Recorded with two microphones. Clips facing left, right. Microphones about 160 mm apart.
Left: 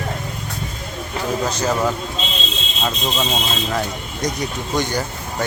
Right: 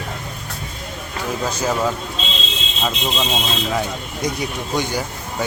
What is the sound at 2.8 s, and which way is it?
Speech, 5° right (ahead or behind).